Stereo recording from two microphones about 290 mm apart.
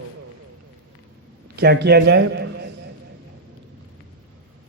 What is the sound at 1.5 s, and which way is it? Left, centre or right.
Speech, right.